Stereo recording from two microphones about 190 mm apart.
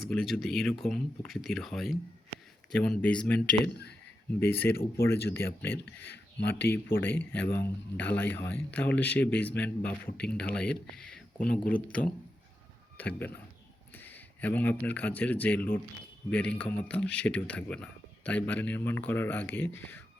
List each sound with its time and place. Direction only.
0.1 s speech: centre (ahead or behind)
4.7 s speech: 55° left (ahead or behind)
5.0 s speech: 10° left (ahead or behind)